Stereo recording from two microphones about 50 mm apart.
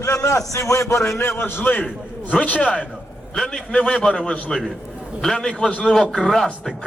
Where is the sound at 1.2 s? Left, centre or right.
Left.